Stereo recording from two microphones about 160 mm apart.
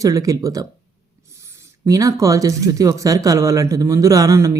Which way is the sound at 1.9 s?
20° right (ahead or behind).